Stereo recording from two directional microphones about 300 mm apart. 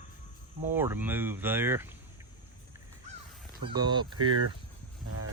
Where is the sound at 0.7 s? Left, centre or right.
Centre.